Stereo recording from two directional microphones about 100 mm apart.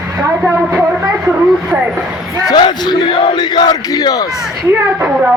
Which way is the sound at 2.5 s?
45° left (ahead or behind).